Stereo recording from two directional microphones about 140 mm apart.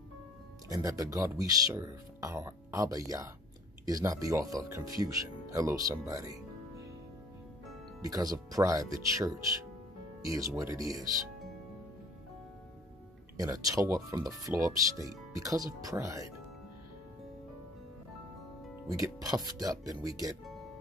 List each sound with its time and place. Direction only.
0.7 s speech: 25° right (ahead or behind)
8.0 s speech: 25° right (ahead or behind)
13.4 s speech: 25° right (ahead or behind)
18.9 s speech: 25° right (ahead or behind)